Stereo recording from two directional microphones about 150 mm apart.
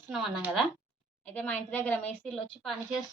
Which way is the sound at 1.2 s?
10° left (ahead or behind).